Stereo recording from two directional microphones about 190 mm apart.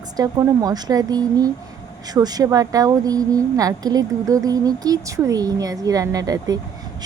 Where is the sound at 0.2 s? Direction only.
20° right (ahead or behind).